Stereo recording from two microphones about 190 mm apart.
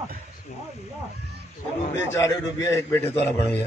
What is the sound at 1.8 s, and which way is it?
Speech, 75° left (ahead or behind).